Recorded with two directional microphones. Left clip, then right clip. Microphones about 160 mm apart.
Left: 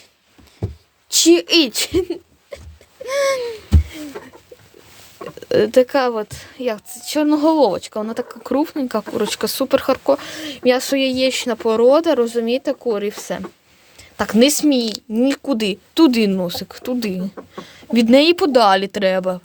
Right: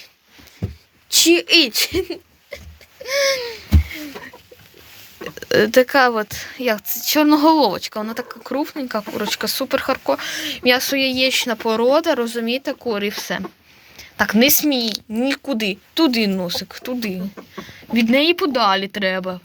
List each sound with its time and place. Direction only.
1.1 s speech: 40° left (ahead or behind)
3.0 s a sound: 25° left (ahead or behind)
5.2 s speech: 5° left (ahead or behind)
7.7 s speech: 20° left (ahead or behind)
8.4 s speech: 35° left (ahead or behind)
10.2 s speech: 20° left (ahead or behind); by 19.4 s 35° left (ahead or behind)